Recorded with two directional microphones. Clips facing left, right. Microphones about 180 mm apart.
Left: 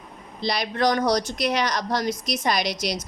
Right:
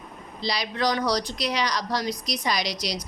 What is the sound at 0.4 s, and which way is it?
A woman's voice, 55° left (ahead or behind).